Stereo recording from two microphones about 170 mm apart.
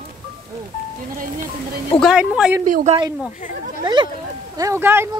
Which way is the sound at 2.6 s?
50° right (ahead or behind).